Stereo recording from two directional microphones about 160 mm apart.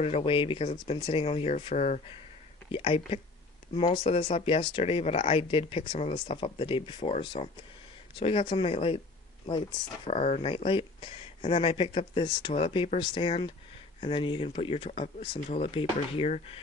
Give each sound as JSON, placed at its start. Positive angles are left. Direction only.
{"t": 0.0, "sound": "speech", "side_deg": 35}
{"t": 10.0, "sound": "speech", "side_deg": 40}